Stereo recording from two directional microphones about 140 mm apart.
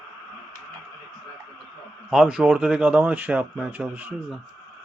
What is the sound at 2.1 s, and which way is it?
Speech, 5° right (ahead or behind).